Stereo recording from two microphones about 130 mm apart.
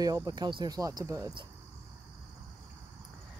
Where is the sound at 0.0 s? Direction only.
30° right (ahead or behind).